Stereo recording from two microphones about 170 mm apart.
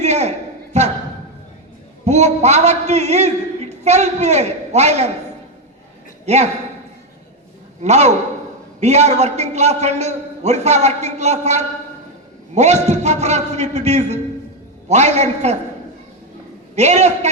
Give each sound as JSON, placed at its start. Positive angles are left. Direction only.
{"t": 0.0, "sound": "a sound", "side_deg": -40}
{"t": 2.0, "sound": "a man's voice", "side_deg": -40}
{"t": 6.2, "sound": "a man's voice", "side_deg": -40}
{"t": 7.8, "sound": "a man's voice", "side_deg": -40}
{"t": 16.7, "sound": "a man's voice", "side_deg": -40}